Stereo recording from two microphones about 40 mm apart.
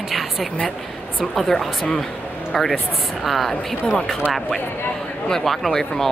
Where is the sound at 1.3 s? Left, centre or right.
Centre.